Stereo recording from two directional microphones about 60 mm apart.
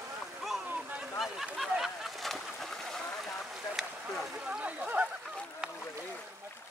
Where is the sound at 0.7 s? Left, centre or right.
Right.